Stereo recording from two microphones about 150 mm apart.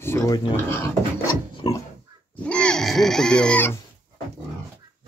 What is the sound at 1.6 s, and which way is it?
Dog, 35° left (ahead or behind).